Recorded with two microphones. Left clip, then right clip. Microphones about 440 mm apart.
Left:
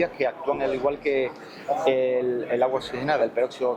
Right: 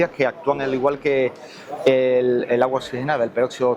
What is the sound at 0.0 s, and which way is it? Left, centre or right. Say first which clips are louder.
Speech: right 5 dB; right.